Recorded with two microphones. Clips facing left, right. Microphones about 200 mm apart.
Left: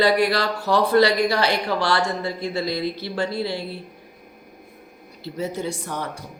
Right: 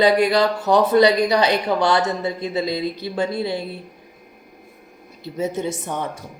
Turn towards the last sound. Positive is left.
turn(degrees=-20)  # may be behind; listen again after turning